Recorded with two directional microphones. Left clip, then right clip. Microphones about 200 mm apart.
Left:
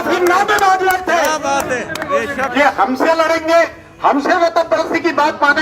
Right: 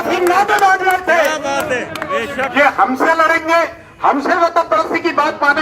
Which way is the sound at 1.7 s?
5° right (ahead or behind).